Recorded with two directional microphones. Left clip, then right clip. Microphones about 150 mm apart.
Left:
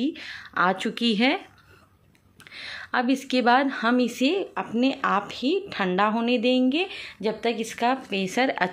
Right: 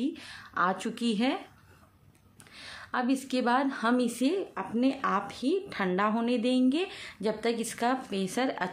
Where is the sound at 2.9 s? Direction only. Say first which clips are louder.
Left 5 dB; 25° left (ahead or behind).